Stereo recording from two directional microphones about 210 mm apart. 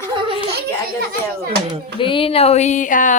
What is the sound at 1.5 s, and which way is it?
Speech, 50° right (ahead or behind).